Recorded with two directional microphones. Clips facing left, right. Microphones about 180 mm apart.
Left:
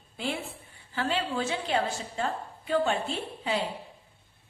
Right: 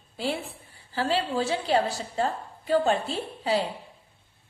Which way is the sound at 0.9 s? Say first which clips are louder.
Right 3 dB; 35° right (ahead or behind).